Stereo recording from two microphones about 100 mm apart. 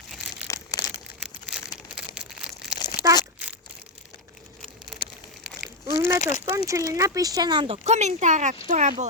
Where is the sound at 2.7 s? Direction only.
45° left (ahead or behind).